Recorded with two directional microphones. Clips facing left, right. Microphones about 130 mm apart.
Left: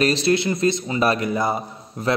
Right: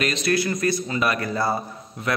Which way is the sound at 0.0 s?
30° left (ahead or behind).